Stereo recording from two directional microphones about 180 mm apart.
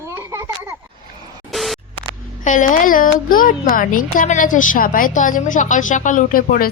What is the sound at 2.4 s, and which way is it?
Speech, 45° left (ahead or behind).